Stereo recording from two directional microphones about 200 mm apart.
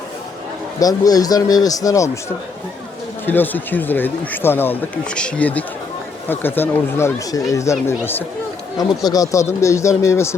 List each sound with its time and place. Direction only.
0.8 s speech: 20° left (ahead or behind)
3.2 s speech: 10° left (ahead or behind)